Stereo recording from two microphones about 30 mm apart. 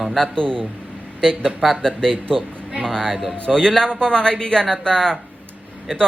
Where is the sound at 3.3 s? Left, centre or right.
Left.